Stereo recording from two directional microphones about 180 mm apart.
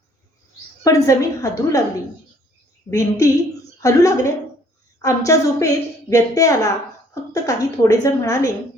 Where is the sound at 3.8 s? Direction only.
20° left (ahead or behind).